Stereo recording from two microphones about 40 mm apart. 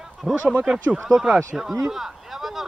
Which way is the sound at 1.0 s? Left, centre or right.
Centre.